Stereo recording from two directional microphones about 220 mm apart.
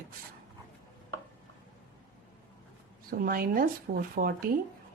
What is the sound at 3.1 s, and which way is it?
Speech, 40° right (ahead or behind).